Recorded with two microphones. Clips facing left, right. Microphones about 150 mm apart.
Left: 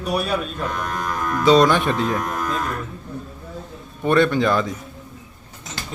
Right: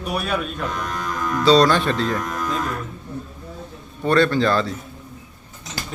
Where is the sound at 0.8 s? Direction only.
50° left (ahead or behind).